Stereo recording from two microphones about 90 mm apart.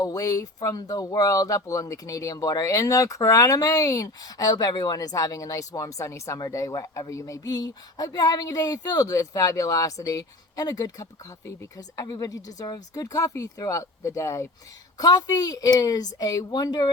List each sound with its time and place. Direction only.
0.0 s a woman's voice: 45° left (ahead or behind)
12.0 s speech: 50° left (ahead or behind); by 14.4 s 35° left (ahead or behind)
14.9 s a woman's voice: 45° left (ahead or behind)